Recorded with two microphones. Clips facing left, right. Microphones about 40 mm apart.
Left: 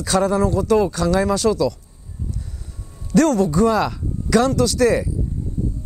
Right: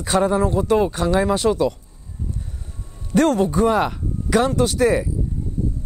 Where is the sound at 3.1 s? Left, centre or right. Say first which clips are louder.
Left 1 dB; right.